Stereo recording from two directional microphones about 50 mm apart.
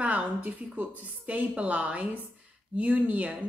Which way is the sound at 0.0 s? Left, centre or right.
Right.